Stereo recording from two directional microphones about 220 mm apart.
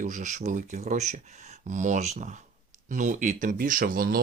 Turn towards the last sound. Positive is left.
turn(degrees=-40)  # may be behind; listen again after turning